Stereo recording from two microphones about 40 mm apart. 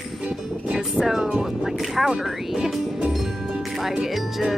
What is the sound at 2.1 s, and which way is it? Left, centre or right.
Speech, right.